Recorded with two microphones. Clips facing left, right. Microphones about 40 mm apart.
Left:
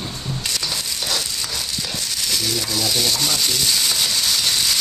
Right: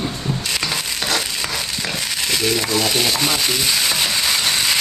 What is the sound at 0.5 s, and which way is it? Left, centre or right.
Crushing, right.